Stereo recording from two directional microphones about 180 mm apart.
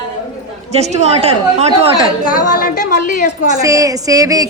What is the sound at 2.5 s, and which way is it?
Speech, 50° left (ahead or behind).